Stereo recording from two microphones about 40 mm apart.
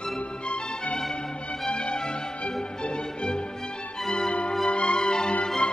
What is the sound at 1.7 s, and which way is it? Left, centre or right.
Music, left.